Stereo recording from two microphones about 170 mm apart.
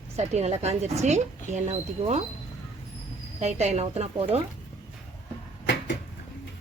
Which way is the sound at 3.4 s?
40° right (ahead or behind).